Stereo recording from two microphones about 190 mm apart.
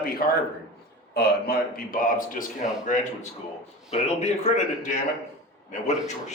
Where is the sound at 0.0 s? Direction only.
50° left (ahead or behind).